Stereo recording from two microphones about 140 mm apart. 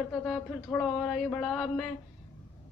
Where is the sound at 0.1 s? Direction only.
10° left (ahead or behind).